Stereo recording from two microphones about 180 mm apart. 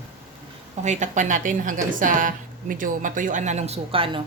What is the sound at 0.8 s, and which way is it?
A woman's voice, 40° right (ahead or behind).